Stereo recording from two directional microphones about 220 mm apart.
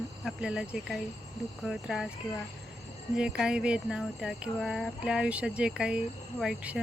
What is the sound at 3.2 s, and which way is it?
Speech, 5° right (ahead or behind).